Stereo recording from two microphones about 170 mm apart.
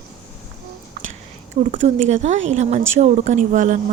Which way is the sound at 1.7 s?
40° right (ahead or behind).